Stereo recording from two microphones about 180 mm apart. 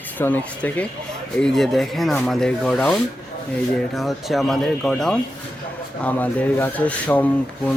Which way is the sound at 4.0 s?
Centre (ahead or behind).